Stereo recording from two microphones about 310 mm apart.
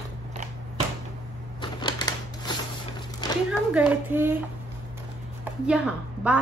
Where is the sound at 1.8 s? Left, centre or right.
Centre.